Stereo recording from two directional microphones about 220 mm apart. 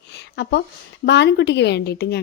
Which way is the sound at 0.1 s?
50° left (ahead or behind).